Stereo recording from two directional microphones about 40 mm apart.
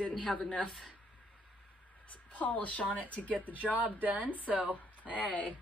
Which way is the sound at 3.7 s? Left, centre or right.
Right.